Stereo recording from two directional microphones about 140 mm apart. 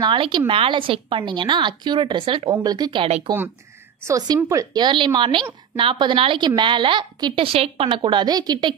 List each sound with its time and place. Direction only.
0.0 s a woman's voice: 35° right (ahead or behind)
4.5 s a woman's voice: 25° right (ahead or behind)